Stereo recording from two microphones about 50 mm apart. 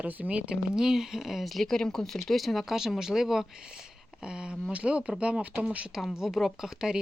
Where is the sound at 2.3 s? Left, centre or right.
Centre.